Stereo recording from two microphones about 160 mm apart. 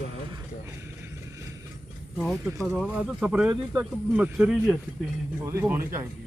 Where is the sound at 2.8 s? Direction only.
5° right (ahead or behind).